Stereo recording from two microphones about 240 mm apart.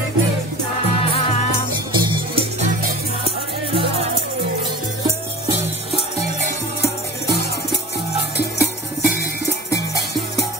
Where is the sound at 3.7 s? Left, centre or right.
Right.